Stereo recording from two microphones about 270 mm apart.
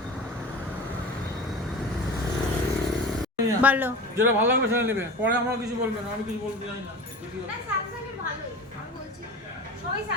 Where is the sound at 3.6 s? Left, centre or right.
Centre.